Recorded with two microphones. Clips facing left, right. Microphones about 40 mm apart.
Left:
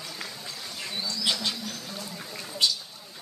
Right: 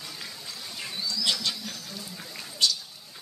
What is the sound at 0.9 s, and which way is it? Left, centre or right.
Bird, left.